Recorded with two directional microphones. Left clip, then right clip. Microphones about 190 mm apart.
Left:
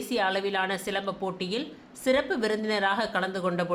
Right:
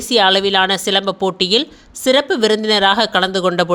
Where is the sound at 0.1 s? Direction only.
40° right (ahead or behind).